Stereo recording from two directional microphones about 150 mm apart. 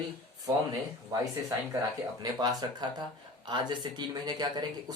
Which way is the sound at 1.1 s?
20° right (ahead or behind).